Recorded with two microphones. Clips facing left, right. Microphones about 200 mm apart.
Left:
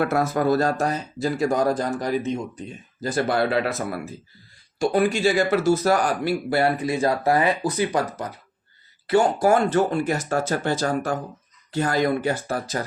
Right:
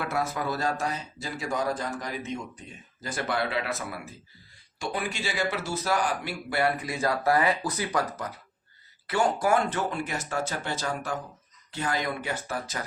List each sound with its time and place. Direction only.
0.0 s speech: 45° left (ahead or behind); by 8.0 s 25° left (ahead or behind)
9.0 s speech: 30° left (ahead or behind)